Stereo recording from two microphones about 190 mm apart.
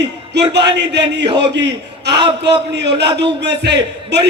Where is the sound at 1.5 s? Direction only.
65° right (ahead or behind).